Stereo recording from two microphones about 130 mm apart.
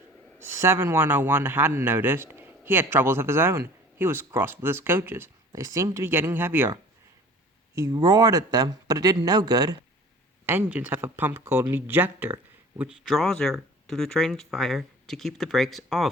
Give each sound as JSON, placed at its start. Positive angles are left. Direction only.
{"t": 0.4, "sound": "speech", "side_deg": -20}
{"t": 7.8, "sound": "speech", "side_deg": -30}
{"t": 10.4, "sound": "speech", "side_deg": -15}
{"t": 13.1, "sound": "speech", "side_deg": 5}